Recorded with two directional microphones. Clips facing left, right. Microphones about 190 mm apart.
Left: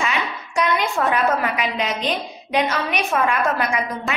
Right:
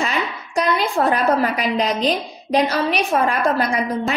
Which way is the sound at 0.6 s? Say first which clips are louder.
Right 2 dB; 35° right (ahead or behind).